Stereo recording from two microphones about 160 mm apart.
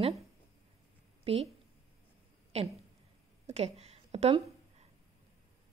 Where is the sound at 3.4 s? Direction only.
40° right (ahead or behind).